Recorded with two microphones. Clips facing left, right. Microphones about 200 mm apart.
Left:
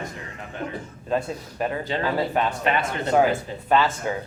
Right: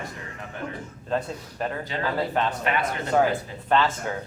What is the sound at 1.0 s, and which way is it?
Speech, 10° left (ahead or behind).